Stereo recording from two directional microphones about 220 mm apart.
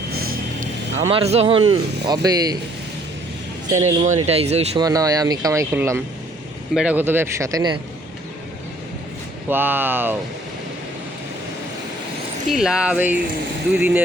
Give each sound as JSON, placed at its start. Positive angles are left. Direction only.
{"t": 0.1, "sound": "vehicle", "side_deg": -45}
{"t": 1.7, "sound": "speech", "side_deg": -15}
{"t": 3.7, "sound": "speech", "side_deg": -30}
{"t": 4.8, "sound": "speech", "side_deg": -15}
{"t": 9.5, "sound": "speech", "side_deg": -10}
{"t": 12.5, "sound": "speech", "side_deg": 0}